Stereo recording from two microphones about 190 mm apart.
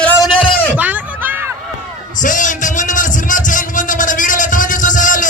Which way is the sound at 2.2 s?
40° left (ahead or behind).